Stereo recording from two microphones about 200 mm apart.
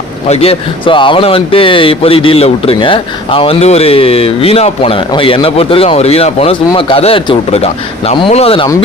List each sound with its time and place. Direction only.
0.3 s speech: 30° left (ahead or behind)